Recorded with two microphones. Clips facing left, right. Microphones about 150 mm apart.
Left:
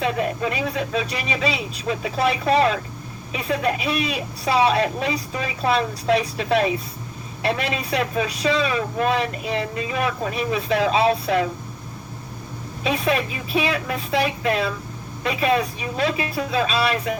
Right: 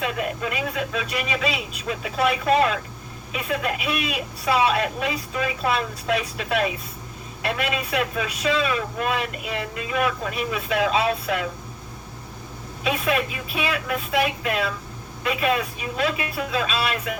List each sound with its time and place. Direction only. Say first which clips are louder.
0.0 s a man's voice: left 4 dB; 30° left (ahead or behind)
12.8 s a man's voice: left 2 dB; 30° left (ahead or behind)